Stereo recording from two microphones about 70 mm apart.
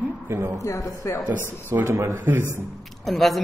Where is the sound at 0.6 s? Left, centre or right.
Left.